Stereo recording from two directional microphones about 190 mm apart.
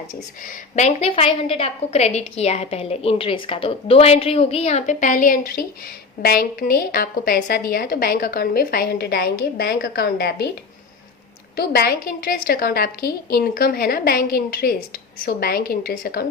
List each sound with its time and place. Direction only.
0.4 s a woman's voice: 35° left (ahead or behind); by 10.5 s 55° left (ahead or behind)
11.5 s a woman's voice: 55° left (ahead or behind)